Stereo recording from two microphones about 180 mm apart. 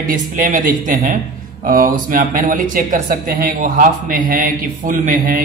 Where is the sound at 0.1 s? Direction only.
50° right (ahead or behind).